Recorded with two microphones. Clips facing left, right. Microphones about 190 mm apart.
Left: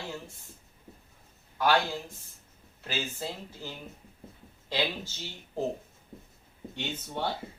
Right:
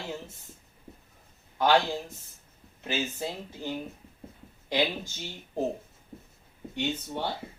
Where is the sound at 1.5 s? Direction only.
20° right (ahead or behind).